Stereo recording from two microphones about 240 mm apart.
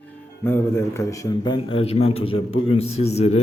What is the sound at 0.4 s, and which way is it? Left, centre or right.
Speech, centre.